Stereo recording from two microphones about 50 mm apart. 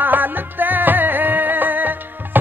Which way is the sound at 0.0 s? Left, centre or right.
Right.